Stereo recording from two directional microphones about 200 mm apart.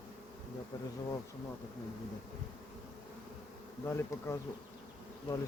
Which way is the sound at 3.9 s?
10° left (ahead or behind).